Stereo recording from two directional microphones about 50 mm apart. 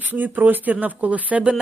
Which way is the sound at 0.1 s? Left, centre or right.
Right.